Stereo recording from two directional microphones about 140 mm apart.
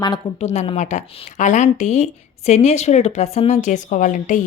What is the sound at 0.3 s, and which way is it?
A woman's voice, 50° left (ahead or behind).